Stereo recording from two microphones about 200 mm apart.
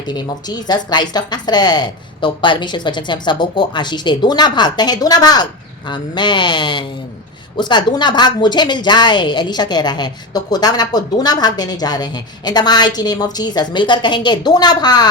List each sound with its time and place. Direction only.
0.0 s speech: 20° left (ahead or behind)